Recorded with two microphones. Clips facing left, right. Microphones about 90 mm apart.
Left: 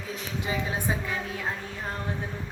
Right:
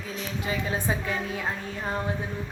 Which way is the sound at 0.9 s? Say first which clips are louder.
Right 1 dB; 5° left (ahead or behind).